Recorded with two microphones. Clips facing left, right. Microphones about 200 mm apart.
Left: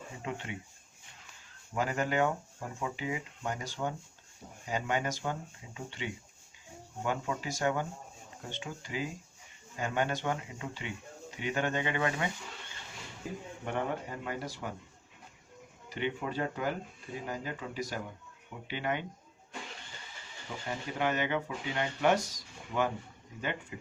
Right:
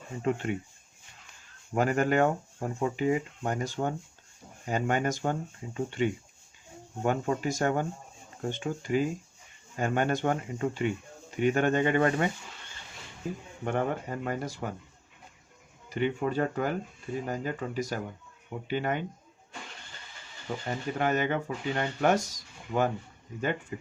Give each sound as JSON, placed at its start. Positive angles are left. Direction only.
{"t": 0.2, "sound": "speech", "side_deg": -50}
{"t": 1.7, "sound": "speech", "side_deg": -50}
{"t": 13.7, "sound": "speech", "side_deg": -50}
{"t": 15.9, "sound": "speech", "side_deg": -45}
{"t": 20.7, "sound": "speech", "side_deg": -45}